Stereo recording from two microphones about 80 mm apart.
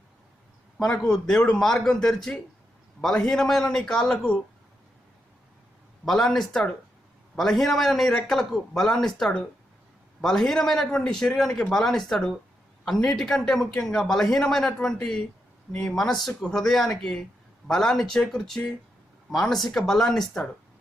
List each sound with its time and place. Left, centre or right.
0.8 s a man's voice: centre
6.1 s a man's voice: centre